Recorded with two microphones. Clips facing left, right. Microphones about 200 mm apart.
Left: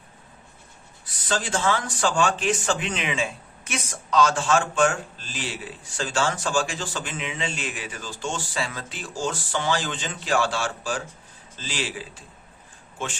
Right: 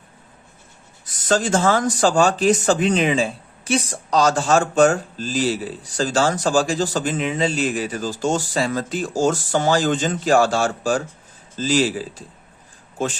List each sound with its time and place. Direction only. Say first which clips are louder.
1.0 s speech: right 8 dB; 45° right (ahead or behind)